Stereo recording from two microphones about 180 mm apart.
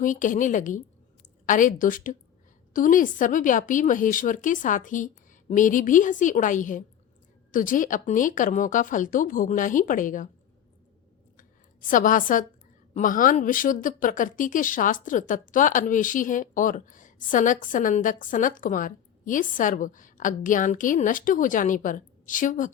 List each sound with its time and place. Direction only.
0.0 s a woman's voice: 45° left (ahead or behind)
11.3 s a sound: 50° left (ahead or behind)
12.9 s a woman's voice: 50° left (ahead or behind)